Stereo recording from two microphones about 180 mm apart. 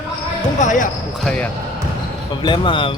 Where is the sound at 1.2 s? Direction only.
5° left (ahead or behind).